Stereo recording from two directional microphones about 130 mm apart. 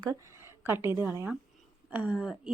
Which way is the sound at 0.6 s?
15° right (ahead or behind).